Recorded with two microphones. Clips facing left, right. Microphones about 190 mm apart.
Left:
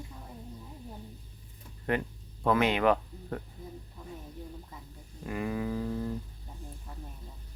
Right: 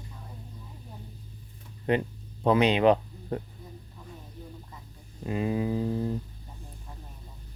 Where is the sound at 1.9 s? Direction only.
20° right (ahead or behind).